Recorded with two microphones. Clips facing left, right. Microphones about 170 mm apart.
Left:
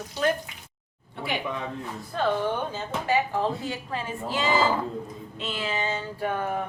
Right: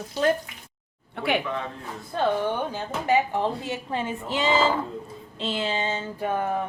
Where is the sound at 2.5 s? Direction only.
15° right (ahead or behind).